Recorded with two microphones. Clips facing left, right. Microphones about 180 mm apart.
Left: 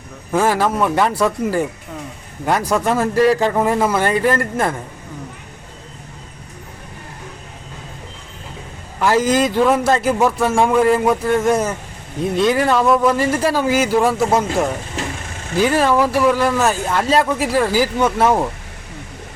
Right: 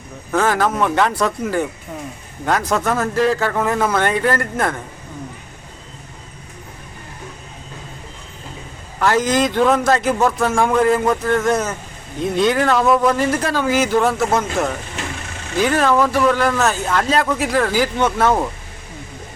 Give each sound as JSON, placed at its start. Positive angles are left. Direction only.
{"t": 0.3, "sound": "speech", "side_deg": 10}
{"t": 9.0, "sound": "speech", "side_deg": 10}
{"t": 15.0, "sound": "vehicle", "side_deg": 35}
{"t": 15.6, "sound": "speech", "side_deg": 10}